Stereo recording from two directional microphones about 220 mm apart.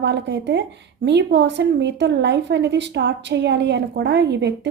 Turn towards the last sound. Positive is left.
turn(degrees=-50)  # may be behind; listen again after turning